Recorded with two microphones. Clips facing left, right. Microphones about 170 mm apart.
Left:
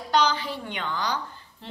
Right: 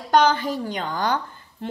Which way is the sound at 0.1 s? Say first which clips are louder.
Right 6 dB; 50° right (ahead or behind).